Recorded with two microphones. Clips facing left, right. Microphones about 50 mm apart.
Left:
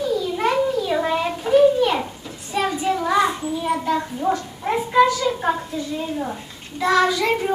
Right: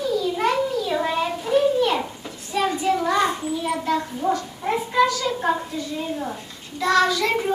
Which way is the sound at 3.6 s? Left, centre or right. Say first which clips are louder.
Left 2 dB; centre.